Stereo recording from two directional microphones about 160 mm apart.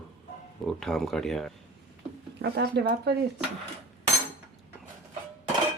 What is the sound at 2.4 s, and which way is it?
Speech, 90° right.